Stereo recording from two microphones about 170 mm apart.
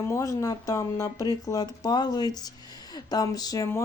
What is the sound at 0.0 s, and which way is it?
Speech, 15° left (ahead or behind).